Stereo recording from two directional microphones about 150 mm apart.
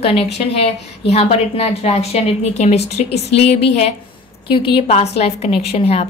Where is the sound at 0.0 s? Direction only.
40° left (ahead or behind).